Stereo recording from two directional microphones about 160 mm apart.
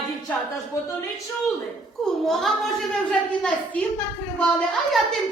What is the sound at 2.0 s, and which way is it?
Speech, centre (ahead or behind).